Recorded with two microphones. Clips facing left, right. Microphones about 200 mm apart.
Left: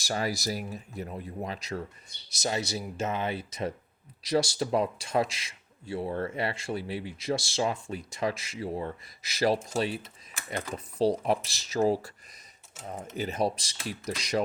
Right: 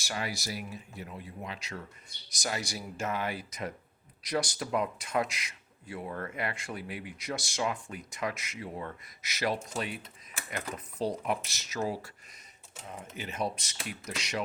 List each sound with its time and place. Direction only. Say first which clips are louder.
0.0 s speech: left 6 dB; 40° left (ahead or behind)
2.4 s speech: left 5 dB; 25° left (ahead or behind)
13.1 s speech: left 6 dB; 35° left (ahead or behind)